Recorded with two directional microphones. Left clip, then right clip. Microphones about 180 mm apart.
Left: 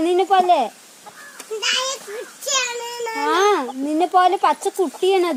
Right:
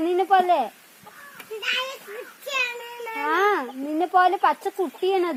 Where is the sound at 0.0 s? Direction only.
15° right (ahead or behind).